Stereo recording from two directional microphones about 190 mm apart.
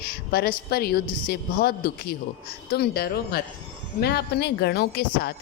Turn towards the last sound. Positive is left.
turn(degrees=55)  # may be behind; listen again after turning